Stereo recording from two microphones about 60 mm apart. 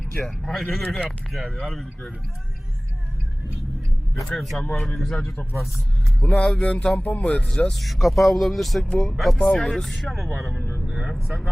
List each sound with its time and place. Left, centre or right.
0.2 s speech: centre
4.4 s speech: centre
6.2 s music: left
7.7 s speech: centre
10.8 s vehicle: centre
11.1 s speech: centre